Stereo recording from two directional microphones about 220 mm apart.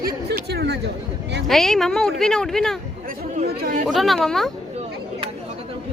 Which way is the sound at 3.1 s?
40° right (ahead or behind).